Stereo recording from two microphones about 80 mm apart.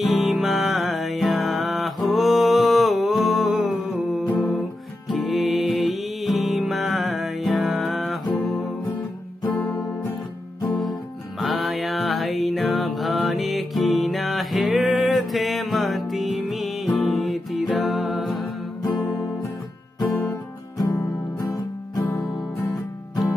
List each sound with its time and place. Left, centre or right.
0.0 s music: centre
9.6 s guitar: centre
10.7 s music: centre
20.7 s music: left